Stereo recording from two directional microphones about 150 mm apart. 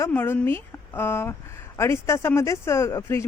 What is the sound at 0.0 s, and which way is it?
A woman's voice, 15° left (ahead or behind).